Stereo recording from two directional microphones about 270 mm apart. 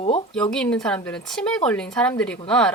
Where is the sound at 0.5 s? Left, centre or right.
Centre.